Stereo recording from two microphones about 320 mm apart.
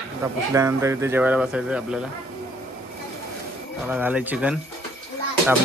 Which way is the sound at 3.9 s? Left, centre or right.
Centre.